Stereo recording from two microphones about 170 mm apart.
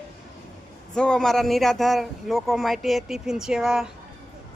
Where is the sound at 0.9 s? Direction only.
5° left (ahead or behind).